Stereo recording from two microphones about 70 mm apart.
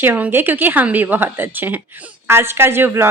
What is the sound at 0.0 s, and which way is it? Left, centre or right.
A woman's voice, right.